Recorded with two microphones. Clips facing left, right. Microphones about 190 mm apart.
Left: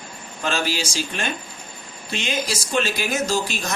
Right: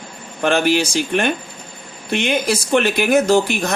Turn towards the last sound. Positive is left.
turn(degrees=-60)  # may be behind; listen again after turning